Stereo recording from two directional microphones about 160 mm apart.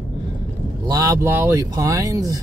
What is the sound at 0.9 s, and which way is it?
Speech, 20° right (ahead or behind).